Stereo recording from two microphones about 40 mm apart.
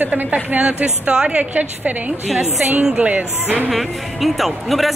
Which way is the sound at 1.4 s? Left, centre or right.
Right.